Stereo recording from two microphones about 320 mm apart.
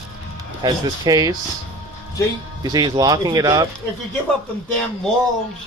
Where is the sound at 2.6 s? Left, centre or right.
Centre.